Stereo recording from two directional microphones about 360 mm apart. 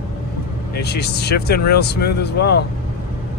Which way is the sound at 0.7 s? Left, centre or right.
Left.